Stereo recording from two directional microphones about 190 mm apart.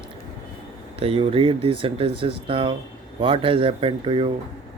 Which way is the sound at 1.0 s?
30° right (ahead or behind).